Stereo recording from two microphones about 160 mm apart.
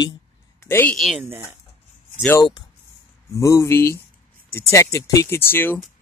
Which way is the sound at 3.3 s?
20° left (ahead or behind).